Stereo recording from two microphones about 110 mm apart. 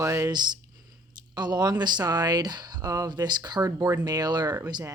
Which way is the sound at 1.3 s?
40° right (ahead or behind).